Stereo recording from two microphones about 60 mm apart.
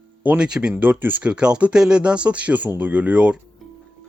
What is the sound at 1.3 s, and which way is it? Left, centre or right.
Speech, centre.